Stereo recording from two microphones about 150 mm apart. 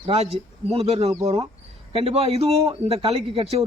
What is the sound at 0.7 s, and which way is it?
A man's voice, 40° right (ahead or behind).